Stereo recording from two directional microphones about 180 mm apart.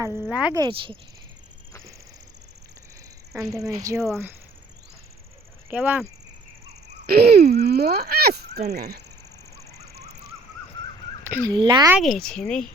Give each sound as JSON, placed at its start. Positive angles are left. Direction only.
{"t": 0.0, "sound": "speech", "side_deg": -15}
{"t": 0.5, "sound": "speech", "side_deg": -25}
{"t": 3.5, "sound": "speech", "side_deg": -20}
{"t": 5.7, "sound": "speech", "side_deg": -10}
{"t": 7.1, "sound": "speech", "side_deg": -60}
{"t": 9.7, "sound": "a sound", "side_deg": -60}
{"t": 11.2, "sound": "a sound", "side_deg": -15}
{"t": 11.5, "sound": "speech", "side_deg": -25}
{"t": 11.9, "sound": "speech", "side_deg": 0}